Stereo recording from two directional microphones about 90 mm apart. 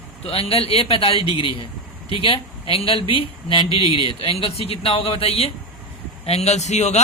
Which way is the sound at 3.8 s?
90° left.